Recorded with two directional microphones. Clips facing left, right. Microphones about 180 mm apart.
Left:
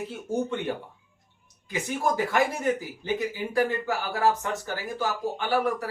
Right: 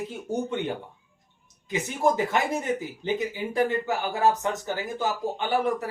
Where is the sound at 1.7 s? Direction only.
20° right (ahead or behind).